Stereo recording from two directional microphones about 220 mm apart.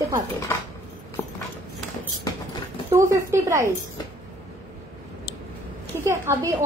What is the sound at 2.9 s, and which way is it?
Speech, 15° right (ahead or behind).